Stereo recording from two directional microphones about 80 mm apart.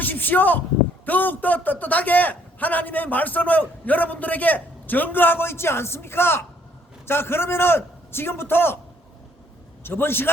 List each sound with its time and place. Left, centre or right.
0.0 s a man's voice: left
9.8 s a man's voice: left